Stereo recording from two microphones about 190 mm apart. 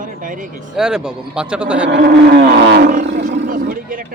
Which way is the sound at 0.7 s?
5° right (ahead or behind).